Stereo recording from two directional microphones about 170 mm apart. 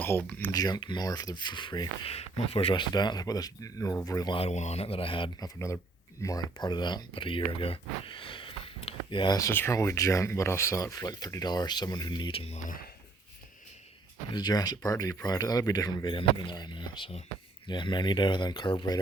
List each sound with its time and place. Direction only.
0.0 s speech: 10° left (ahead or behind)
0.5 s speech: 25° left (ahead or behind)
4.4 s speech: 40° left (ahead or behind)
5.5 s speech: 15° left (ahead or behind); by 12.5 s 35° left (ahead or behind)
12.6 s speech: 55° left (ahead or behind)
14.3 s speech: 25° left (ahead or behind)